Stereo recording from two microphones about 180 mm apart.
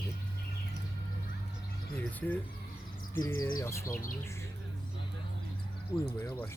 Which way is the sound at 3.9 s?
50° left (ahead or behind).